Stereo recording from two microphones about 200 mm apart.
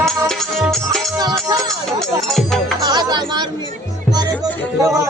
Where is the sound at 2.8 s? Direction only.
20° right (ahead or behind).